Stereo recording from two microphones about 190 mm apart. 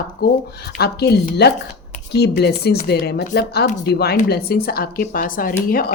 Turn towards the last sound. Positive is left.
turn(degrees=50)  # may be behind; listen again after turning